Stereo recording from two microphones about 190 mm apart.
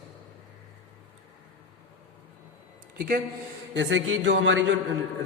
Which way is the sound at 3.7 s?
80° right.